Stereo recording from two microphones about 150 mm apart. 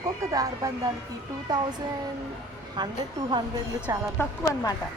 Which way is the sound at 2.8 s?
30° right (ahead or behind).